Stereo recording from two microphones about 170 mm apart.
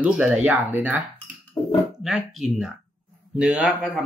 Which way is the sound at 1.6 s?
20° left (ahead or behind).